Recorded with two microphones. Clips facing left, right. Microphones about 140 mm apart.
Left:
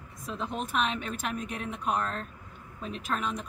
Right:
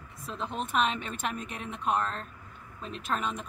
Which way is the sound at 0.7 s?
Centre (ahead or behind).